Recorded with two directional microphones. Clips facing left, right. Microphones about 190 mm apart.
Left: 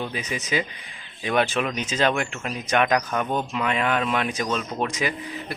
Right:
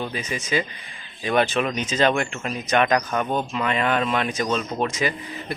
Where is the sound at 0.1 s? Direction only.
10° left (ahead or behind).